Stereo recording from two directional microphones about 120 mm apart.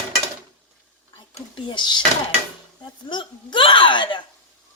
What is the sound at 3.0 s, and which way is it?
A woman's voice, 40° left (ahead or behind).